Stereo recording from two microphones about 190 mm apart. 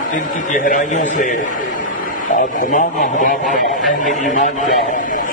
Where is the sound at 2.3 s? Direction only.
40° left (ahead or behind).